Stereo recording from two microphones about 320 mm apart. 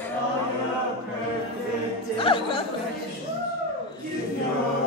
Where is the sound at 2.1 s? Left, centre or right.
Centre.